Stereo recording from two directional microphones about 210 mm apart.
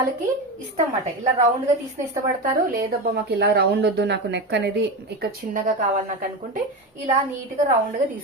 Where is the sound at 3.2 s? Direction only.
55° right (ahead or behind).